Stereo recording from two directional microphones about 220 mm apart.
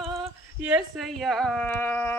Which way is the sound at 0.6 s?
5° right (ahead or behind).